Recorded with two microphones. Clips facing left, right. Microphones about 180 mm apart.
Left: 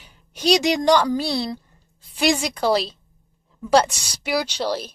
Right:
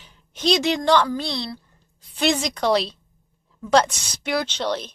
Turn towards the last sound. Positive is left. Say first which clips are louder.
# left 1 dB
turn(degrees=5)  # may be behind; listen again after turning